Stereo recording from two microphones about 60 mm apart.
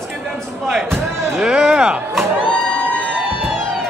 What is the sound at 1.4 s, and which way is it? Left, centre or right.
Music, centre.